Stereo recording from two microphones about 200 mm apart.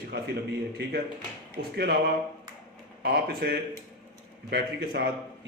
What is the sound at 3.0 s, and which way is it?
A man's voice, 50° right (ahead or behind).